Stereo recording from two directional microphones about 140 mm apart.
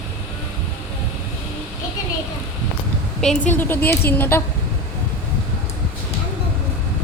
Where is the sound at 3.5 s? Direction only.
15° left (ahead or behind).